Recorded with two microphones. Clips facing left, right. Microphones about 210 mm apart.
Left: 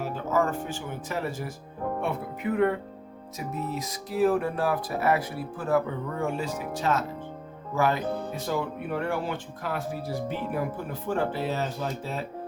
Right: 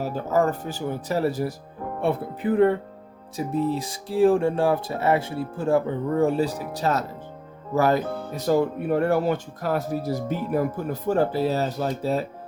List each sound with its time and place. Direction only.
0.3 s speech: 35° right (ahead or behind)